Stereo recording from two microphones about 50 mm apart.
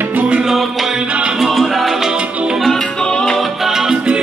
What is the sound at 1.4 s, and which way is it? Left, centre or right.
Music, centre.